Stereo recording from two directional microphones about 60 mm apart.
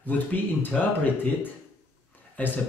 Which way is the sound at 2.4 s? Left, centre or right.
Left.